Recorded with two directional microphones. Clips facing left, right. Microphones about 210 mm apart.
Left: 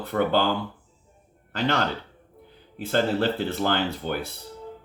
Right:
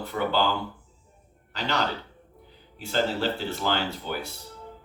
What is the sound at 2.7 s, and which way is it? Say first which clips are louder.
Speech: left 3 dB; 55° left (ahead or behind).